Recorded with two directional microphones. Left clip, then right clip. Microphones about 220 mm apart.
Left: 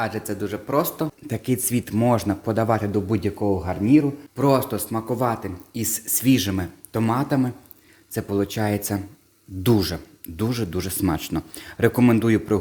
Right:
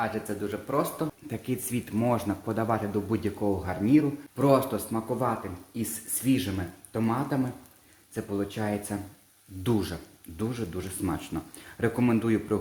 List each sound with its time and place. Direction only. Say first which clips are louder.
0.0 s speech: left 4 dB; 40° left (ahead or behind)